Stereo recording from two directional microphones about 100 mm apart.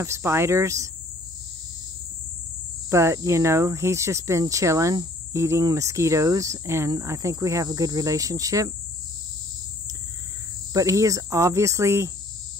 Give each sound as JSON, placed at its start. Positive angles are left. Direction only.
{"t": 0.0, "sound": "speech", "side_deg": -30}
{"t": 2.9, "sound": "speech", "side_deg": -30}
{"t": 10.7, "sound": "speech", "side_deg": -35}